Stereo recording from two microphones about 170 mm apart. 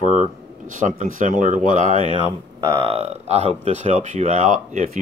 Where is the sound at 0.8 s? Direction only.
50° right (ahead or behind).